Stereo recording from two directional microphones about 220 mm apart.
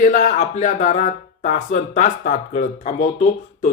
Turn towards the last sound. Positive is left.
turn(degrees=30)  # may be behind; listen again after turning